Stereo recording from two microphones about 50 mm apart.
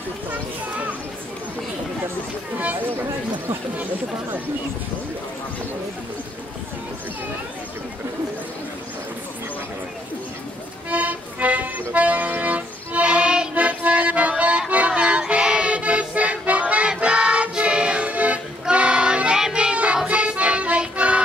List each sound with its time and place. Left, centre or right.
0.3 s a child's voice: right
2.6 s speech: right
10.9 s music: right